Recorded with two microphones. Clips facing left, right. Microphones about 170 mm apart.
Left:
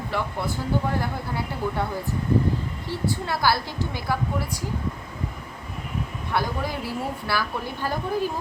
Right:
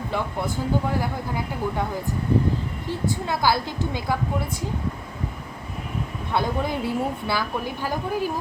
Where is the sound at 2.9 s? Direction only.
20° right (ahead or behind).